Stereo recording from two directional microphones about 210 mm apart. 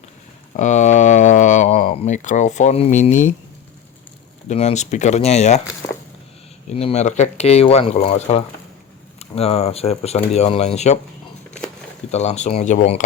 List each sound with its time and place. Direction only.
0.5 s speech: 35° left (ahead or behind)
4.4 s speech: 30° left (ahead or behind)
6.7 s speech: 30° left (ahead or behind)
12.1 s speech: 30° left (ahead or behind)